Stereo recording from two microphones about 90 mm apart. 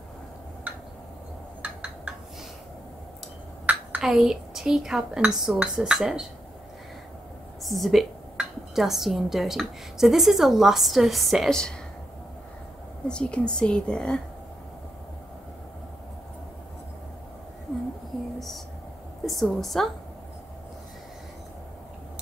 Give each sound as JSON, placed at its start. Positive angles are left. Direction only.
{"t": 1.6, "sound": "a sound", "side_deg": -10}
{"t": 3.7, "sound": "a sound", "side_deg": -15}
{"t": 4.0, "sound": "a woman's voice", "side_deg": -5}
{"t": 7.6, "sound": "a woman's voice", "side_deg": 0}
{"t": 13.1, "sound": "speech", "side_deg": 10}
{"t": 19.2, "sound": "a woman's voice", "side_deg": 0}